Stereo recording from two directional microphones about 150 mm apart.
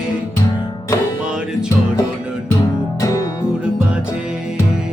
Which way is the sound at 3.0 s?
20° left (ahead or behind).